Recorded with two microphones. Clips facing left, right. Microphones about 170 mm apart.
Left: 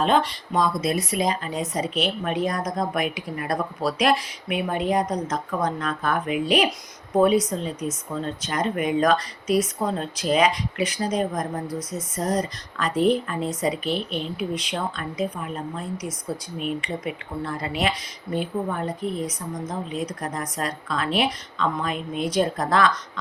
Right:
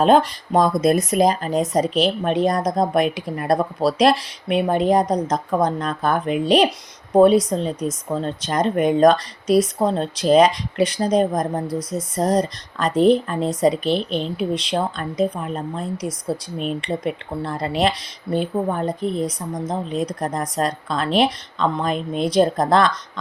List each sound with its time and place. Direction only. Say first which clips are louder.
0.0 s a woman's voice: right 6 dB; 40° right (ahead or behind)